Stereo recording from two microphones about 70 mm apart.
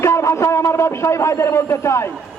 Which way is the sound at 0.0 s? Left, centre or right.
Left.